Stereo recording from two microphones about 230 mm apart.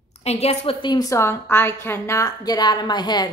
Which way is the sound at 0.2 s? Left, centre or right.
Left.